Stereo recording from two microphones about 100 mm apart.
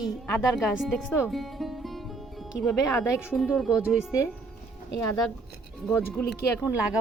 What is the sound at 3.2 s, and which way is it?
Speech, 5° right (ahead or behind).